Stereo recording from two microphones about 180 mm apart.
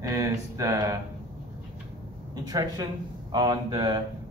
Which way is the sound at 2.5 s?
20° right (ahead or behind).